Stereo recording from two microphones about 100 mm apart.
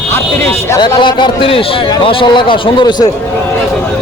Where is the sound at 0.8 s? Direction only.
50° left (ahead or behind).